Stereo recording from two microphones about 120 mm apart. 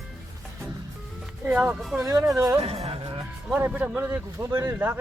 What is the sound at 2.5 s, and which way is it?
Music, 60° right (ahead or behind).